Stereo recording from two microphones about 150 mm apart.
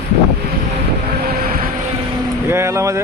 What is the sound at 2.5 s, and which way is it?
Vehicle, 15° right (ahead or behind).